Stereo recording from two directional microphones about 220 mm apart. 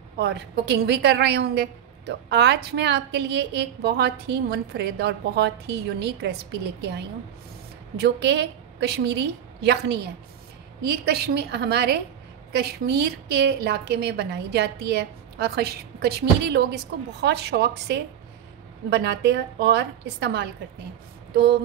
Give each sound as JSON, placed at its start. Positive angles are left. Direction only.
{"t": 0.2, "sound": "a woman's voice", "side_deg": -50}
{"t": 8.0, "sound": "a woman's voice", "side_deg": -50}
{"t": 11.1, "sound": "a woman's voice", "side_deg": -45}